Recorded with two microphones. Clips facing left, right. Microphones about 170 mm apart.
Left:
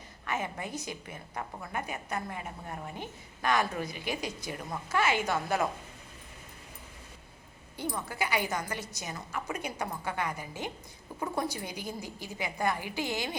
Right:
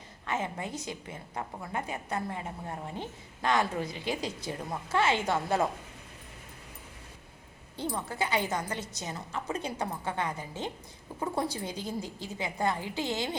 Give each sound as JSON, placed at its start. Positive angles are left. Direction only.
{"t": 0.3, "sound": "a woman's voice", "side_deg": -25}
{"t": 7.8, "sound": "a woman's voice", "side_deg": -25}